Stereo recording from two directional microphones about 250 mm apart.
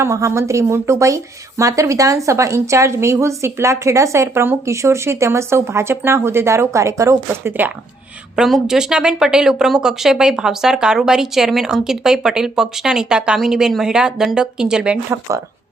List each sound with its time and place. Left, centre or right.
0.0 s a woman's voice: centre